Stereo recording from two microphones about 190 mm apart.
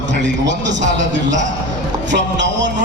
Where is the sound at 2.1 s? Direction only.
70° right (ahead or behind).